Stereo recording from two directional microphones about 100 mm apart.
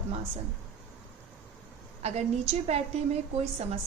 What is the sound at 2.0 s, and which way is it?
A woman's voice, 90° right.